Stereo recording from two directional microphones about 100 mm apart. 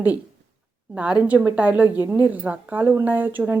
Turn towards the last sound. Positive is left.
turn(degrees=-15)  # may be behind; listen again after turning